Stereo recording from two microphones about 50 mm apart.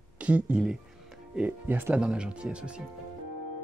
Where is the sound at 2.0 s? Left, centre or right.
Centre.